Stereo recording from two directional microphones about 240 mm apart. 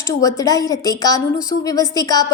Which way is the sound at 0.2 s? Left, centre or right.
Centre.